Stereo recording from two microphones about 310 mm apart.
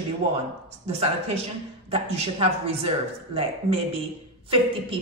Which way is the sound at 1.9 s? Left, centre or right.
Centre.